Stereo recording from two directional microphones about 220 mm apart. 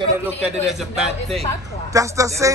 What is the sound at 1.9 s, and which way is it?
Speech, 15° right (ahead or behind).